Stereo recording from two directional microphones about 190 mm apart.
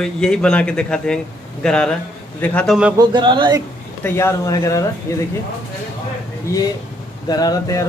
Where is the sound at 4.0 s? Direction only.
15° left (ahead or behind).